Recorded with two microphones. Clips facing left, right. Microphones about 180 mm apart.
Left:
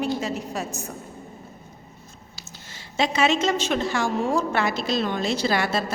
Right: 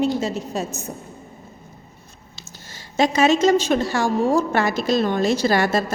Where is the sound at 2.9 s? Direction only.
45° right (ahead or behind).